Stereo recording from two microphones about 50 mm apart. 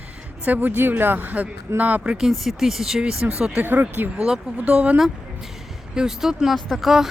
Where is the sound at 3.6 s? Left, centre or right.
Right.